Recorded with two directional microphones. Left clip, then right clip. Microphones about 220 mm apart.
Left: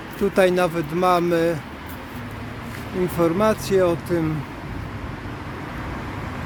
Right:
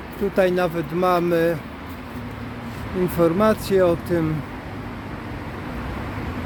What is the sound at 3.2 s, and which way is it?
Speech, centre (ahead or behind).